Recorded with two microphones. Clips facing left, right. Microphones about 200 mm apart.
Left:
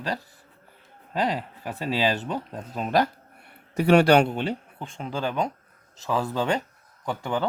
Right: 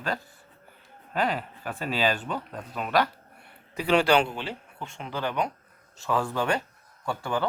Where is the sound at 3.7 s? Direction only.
45° left (ahead or behind).